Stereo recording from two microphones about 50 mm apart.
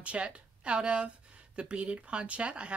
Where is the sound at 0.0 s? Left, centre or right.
Right.